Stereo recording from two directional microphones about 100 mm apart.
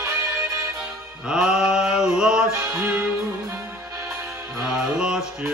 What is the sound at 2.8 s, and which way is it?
Music, 15° right (ahead or behind).